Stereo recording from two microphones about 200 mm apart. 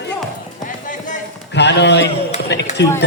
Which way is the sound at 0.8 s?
40° left (ahead or behind).